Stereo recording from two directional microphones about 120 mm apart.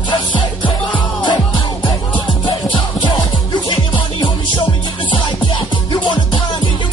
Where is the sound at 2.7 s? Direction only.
40° left (ahead or behind).